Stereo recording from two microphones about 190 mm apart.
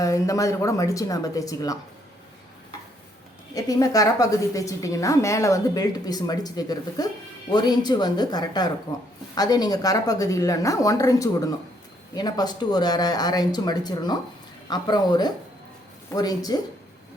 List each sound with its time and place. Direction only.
0.0 s a woman's voice: 15° left (ahead or behind)
3.5 s a woman's voice: 20° left (ahead or behind)